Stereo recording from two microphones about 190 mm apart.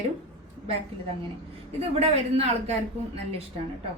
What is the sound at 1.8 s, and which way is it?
Speech, 30° right (ahead or behind).